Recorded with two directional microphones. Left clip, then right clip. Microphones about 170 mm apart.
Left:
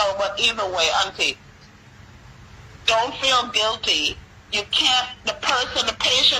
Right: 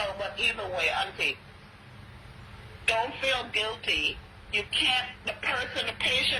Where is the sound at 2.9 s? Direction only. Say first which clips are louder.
Left 8 dB; 30° left (ahead or behind).